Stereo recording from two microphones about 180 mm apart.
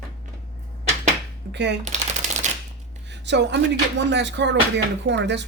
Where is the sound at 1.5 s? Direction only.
75° right (ahead or behind).